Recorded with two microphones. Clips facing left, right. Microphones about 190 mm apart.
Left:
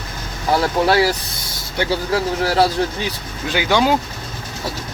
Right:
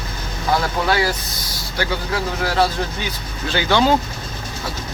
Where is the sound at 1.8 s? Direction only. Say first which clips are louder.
Left 3 dB; 25° left (ahead or behind).